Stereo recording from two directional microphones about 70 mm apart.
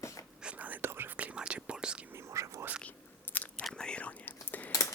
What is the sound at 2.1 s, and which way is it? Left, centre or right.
Whispering, right.